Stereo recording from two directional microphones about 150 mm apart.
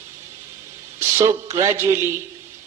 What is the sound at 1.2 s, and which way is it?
Speech, 20° right (ahead or behind).